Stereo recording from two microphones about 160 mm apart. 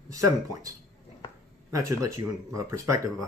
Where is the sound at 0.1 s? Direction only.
20° right (ahead or behind).